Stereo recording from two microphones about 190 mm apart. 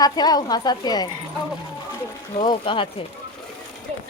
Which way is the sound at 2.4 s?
25° left (ahead or behind).